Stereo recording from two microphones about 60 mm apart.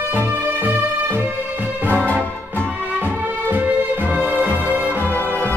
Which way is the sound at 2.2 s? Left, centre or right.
Left.